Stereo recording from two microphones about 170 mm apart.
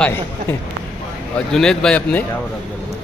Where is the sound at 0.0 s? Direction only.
10° left (ahead or behind).